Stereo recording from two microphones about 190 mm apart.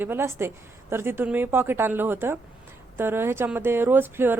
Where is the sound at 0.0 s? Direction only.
10° right (ahead or behind).